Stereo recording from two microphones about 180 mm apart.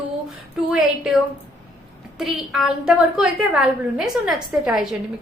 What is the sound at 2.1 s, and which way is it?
A woman's voice, centre (ahead or behind).